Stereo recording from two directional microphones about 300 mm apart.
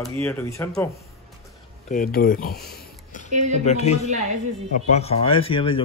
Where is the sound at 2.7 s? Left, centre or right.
Left.